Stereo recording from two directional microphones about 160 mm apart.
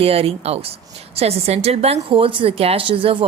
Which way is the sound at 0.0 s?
40° right (ahead or behind).